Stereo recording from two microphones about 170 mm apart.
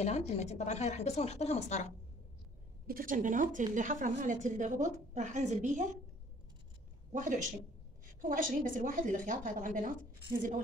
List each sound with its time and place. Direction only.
0.0 s speech: 40° left (ahead or behind)
2.9 s a woman's voice: 55° right (ahead or behind)
7.1 s a woman's voice: 50° right (ahead or behind)